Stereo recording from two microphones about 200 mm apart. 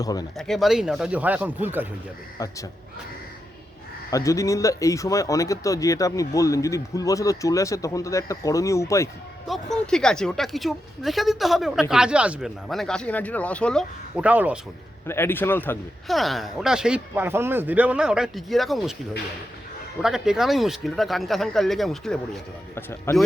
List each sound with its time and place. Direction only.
0.0 s speech: 20° left (ahead or behind)
0.3 s a woman's voice: centre (ahead or behind)
2.4 s speech: 15° left (ahead or behind)
4.1 s speech: 15° left (ahead or behind)
9.5 s a woman's voice: centre (ahead or behind)
15.0 s a woman's voice: 10° left (ahead or behind)
20.0 s a woman's voice: centre (ahead or behind)
22.7 s speech: 10° left (ahead or behind)